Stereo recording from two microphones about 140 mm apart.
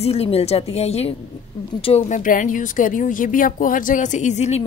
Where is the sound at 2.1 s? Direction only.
70° left (ahead or behind).